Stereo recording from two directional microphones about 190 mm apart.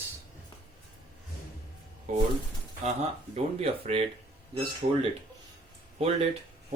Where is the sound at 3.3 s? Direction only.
35° right (ahead or behind).